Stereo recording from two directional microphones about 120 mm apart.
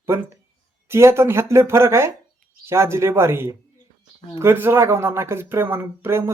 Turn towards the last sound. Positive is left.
turn(degrees=-20)  # may be behind; listen again after turning